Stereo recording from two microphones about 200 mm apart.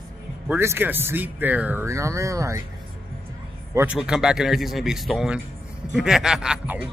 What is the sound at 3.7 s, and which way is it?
Speech, 5° right (ahead or behind).